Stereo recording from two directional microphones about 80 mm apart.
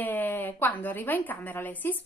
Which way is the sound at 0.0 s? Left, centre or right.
Left.